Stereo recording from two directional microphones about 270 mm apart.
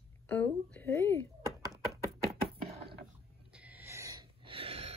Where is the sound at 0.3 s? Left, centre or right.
Centre.